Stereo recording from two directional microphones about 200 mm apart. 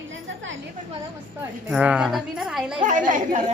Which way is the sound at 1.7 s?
5° right (ahead or behind).